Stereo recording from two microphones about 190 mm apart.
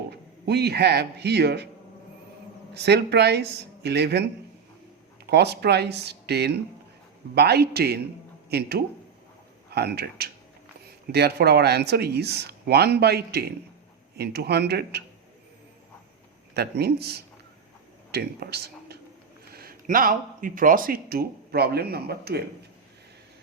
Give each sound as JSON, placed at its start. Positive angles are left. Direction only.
{"t": 0.1, "sound": "speech", "side_deg": -60}
{"t": 2.7, "sound": "speech", "side_deg": -60}
{"t": 16.6, "sound": "speech", "side_deg": -60}